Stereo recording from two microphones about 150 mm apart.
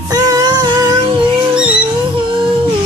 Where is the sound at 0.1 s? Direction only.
25° right (ahead or behind).